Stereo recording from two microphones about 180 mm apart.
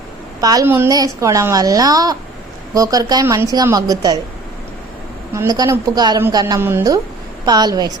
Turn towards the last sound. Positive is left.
turn(degrees=-20)  # may be behind; listen again after turning